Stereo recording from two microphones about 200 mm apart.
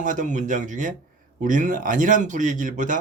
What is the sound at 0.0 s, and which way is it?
Speech, 40° right (ahead or behind).